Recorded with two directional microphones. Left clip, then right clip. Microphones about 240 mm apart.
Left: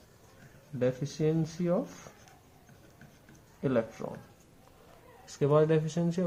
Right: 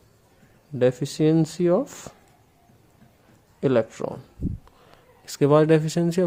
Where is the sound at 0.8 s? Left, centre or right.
Right.